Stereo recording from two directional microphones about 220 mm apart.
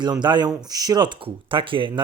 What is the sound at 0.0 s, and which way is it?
Speech, 20° right (ahead or behind).